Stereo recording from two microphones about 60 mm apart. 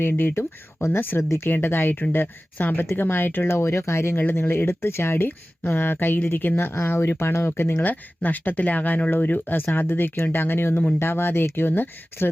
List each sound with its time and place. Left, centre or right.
0.1 s speech: left
3.6 s speech: left
7.8 s speech: left